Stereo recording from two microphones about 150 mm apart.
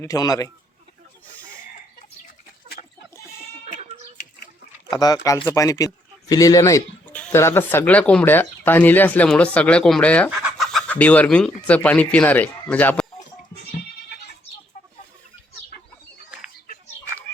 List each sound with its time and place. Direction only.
0.0 s speech: 25° left (ahead or behind)
2.8 s chicken: 45° left (ahead or behind)
3.7 s a sound: 45° right (ahead or behind)
4.9 s speech: 25° left (ahead or behind)
7.0 s speech: 10° left (ahead or behind)
10.2 s speech: 5° right (ahead or behind); by 13.1 s 10° left (ahead or behind)